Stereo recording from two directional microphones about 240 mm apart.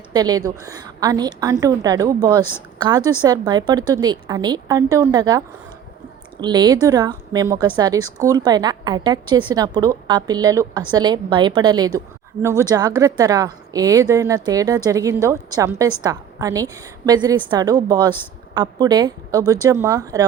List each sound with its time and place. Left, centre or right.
0.1 s a woman's voice: centre
6.4 s a woman's voice: centre